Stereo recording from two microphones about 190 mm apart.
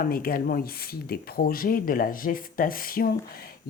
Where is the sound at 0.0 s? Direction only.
50° left (ahead or behind).